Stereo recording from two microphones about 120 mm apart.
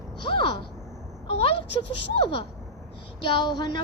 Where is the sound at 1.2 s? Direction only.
50° left (ahead or behind).